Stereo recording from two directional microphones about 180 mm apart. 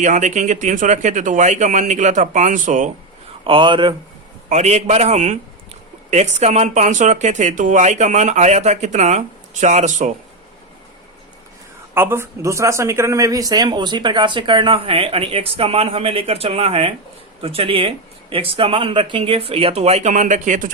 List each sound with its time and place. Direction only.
0.0 s speech: 45° right (ahead or behind)
3.4 s speech: 25° right (ahead or behind)
4.4 s speech: 40° right (ahead or behind)
11.9 s speech: 15° right (ahead or behind); by 20.7 s 45° right (ahead or behind)